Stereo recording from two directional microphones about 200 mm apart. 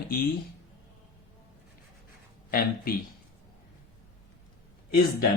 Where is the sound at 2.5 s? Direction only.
50° left (ahead or behind).